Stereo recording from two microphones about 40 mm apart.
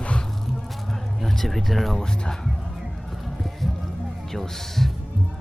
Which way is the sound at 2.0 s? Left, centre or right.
Centre.